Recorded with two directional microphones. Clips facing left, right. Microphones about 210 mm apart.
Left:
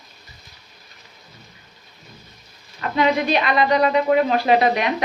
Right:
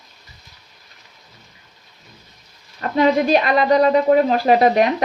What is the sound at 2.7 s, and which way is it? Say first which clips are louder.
A woman's voice: right 3 dB; 40° right (ahead or behind).